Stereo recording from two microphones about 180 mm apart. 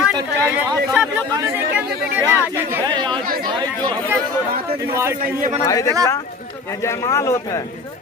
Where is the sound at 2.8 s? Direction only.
25° right (ahead or behind).